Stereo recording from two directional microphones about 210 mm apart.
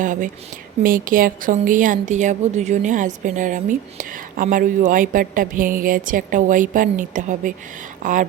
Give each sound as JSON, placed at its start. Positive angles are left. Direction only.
{"t": 0.0, "sound": "a woman's voice", "side_deg": -40}